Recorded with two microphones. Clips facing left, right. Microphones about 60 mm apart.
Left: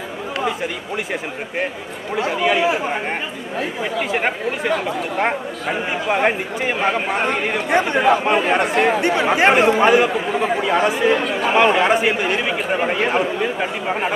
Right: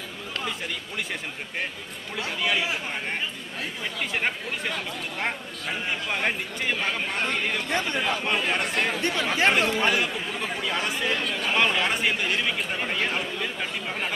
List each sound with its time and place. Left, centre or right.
2.1 s a man's voice: centre
4.2 s speech: left
8.5 s speech: centre